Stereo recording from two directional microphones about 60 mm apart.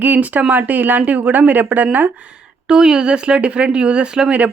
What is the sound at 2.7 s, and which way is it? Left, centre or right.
Speech, centre.